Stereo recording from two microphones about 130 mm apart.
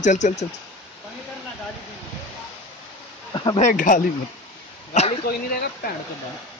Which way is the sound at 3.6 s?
85° left.